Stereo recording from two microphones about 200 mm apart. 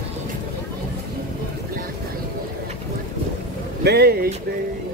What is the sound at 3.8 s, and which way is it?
Speech, 55° right (ahead or behind).